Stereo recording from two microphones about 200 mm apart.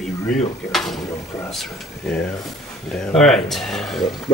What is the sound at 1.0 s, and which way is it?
Speech, 15° left (ahead or behind).